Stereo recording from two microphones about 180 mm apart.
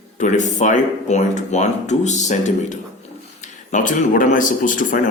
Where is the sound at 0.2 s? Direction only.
45° left (ahead or behind).